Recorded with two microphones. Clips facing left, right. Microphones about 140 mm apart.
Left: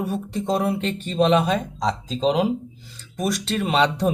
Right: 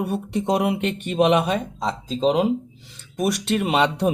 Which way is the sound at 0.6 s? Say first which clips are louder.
Right 1 dB; 15° right (ahead or behind).